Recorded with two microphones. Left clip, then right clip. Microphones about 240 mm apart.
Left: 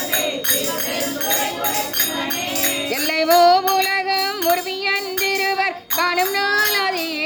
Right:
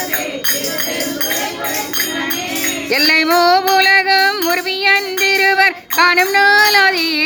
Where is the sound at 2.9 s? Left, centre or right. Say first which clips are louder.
Right 4 dB; centre.